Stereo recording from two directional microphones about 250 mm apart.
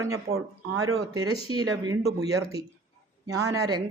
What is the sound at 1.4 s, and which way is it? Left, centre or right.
Speech, centre.